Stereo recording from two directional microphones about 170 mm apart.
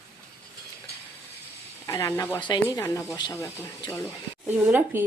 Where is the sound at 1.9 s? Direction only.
15° left (ahead or behind).